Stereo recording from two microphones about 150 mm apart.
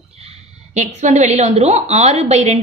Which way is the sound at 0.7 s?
50° right (ahead or behind).